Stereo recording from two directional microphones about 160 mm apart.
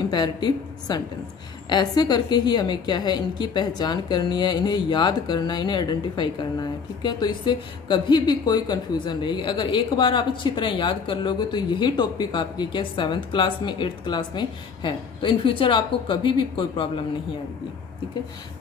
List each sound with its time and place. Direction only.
0.1 s a woman's voice: 25° left (ahead or behind)